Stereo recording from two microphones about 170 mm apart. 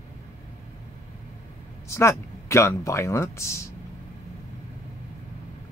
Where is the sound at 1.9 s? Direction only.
15° left (ahead or behind).